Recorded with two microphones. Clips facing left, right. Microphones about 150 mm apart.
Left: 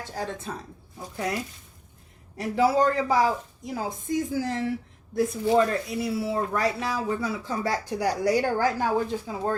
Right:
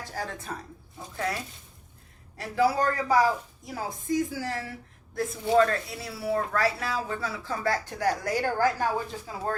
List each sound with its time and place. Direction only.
0.2 s speech: 20° left (ahead or behind)
2.4 s speech: 20° left (ahead or behind)